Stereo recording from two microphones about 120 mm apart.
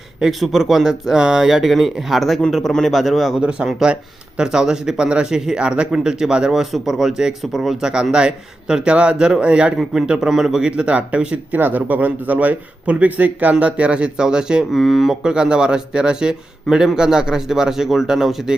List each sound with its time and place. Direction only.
0.2 s speech: centre (ahead or behind)